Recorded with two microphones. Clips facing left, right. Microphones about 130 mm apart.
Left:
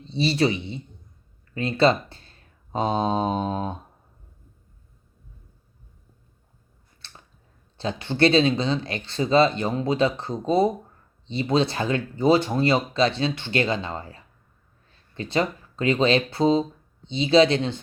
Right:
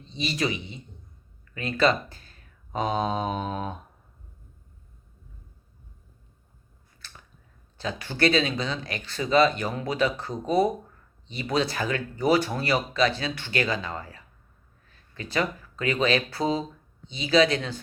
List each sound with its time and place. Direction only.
0.1 s speech: 30° left (ahead or behind)
7.0 s a sound: 30° left (ahead or behind)
7.8 s speech: 25° left (ahead or behind)